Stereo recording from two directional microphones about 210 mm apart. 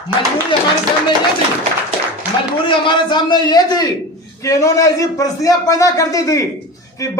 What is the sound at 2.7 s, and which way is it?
A man's voice, 20° left (ahead or behind).